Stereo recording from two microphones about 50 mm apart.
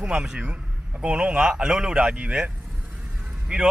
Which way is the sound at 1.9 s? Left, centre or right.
Right.